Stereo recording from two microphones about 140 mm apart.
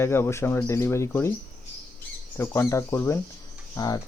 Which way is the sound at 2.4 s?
20° left (ahead or behind).